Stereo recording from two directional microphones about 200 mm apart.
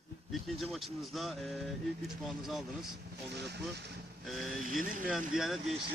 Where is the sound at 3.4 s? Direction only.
55° right (ahead or behind).